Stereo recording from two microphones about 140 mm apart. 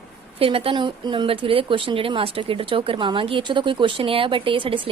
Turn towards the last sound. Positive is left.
turn(degrees=-40)  # may be behind; listen again after turning